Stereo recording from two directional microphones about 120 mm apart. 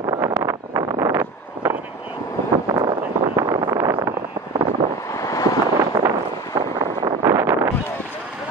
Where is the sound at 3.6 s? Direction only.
35° right (ahead or behind).